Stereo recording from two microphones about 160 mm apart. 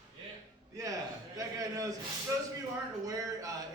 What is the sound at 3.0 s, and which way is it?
Speech, 20° right (ahead or behind).